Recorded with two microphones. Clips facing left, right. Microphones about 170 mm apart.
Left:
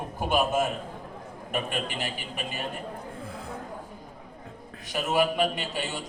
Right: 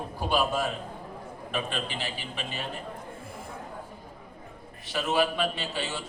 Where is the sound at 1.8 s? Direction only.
45° left (ahead or behind).